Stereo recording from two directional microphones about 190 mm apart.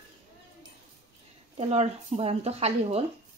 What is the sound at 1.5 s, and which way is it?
A woman's voice, 35° right (ahead or behind).